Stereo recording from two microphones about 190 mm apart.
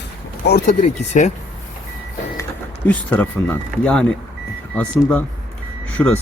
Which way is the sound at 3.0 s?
10° left (ahead or behind).